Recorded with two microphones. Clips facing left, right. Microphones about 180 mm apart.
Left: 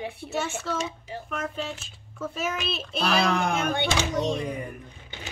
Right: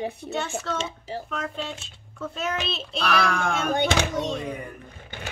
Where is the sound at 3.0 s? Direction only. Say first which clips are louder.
Left 1 dB; 25° left (ahead or behind).